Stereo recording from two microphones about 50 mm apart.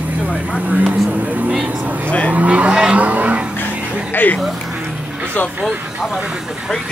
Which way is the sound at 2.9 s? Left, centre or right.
Right.